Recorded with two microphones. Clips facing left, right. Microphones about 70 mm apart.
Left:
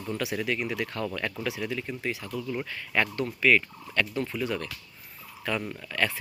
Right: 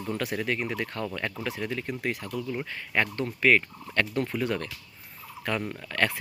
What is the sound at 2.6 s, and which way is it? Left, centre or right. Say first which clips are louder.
Speech: even; right.